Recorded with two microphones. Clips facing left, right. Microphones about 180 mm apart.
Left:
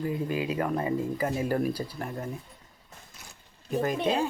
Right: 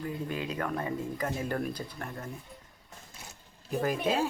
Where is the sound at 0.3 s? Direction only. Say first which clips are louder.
Left 5 dB; 10° left (ahead or behind).